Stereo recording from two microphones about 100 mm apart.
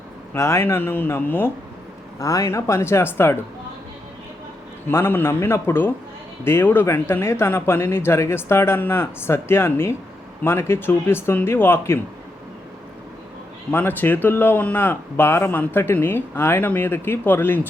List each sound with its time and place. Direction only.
0.3 s speech: 30° left (ahead or behind)
2.1 s speech: 35° left (ahead or behind)
4.9 s speech: 20° left (ahead or behind)
13.7 s speech: 20° left (ahead or behind)